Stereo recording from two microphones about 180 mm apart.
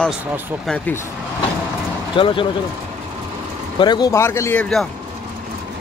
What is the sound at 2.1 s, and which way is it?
Speech, 30° left (ahead or behind).